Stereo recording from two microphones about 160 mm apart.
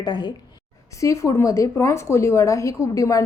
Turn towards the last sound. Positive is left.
turn(degrees=20)  # may be behind; listen again after turning